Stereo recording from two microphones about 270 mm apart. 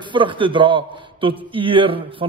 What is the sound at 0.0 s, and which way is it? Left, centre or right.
A man's voice, centre.